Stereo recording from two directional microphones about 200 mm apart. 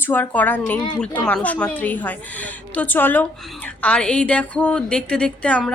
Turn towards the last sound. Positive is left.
turn(degrees=5)  # may be behind; listen again after turning